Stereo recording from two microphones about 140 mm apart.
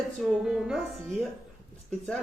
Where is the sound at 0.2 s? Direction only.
5° right (ahead or behind).